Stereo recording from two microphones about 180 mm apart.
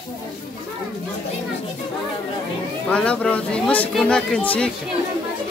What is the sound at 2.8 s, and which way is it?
Speech, 5° left (ahead or behind).